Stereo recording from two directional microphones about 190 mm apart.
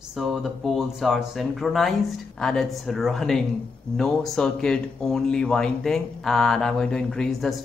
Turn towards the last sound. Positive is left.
turn(degrees=0)  # may be behind; listen again after turning